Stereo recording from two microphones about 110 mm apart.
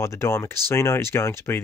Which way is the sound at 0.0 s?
25° left (ahead or behind).